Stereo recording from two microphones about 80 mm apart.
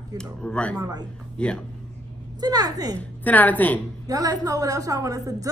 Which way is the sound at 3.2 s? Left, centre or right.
Left.